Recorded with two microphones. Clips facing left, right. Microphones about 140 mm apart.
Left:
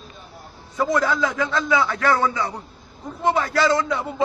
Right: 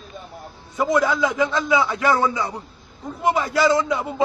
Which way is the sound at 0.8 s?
15° right (ahead or behind).